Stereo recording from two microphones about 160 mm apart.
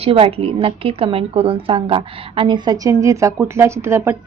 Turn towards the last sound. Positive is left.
turn(degrees=-15)  # may be behind; listen again after turning